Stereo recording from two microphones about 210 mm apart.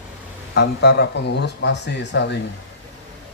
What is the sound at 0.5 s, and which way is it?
Speech, 55° left (ahead or behind).